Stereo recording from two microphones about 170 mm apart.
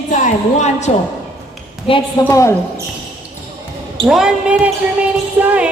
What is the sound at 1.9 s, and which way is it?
Speech, 35° left (ahead or behind).